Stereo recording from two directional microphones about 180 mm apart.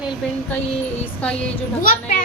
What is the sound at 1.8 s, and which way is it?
Speech, 50° left (ahead or behind).